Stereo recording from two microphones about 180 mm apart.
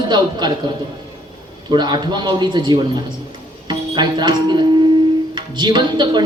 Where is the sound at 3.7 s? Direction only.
25° right (ahead or behind).